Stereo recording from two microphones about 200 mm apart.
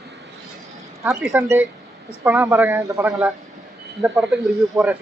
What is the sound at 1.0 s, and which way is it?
Speech, 15° right (ahead or behind).